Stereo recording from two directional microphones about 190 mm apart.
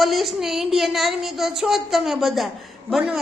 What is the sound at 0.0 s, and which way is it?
A woman's voice, centre (ahead or behind).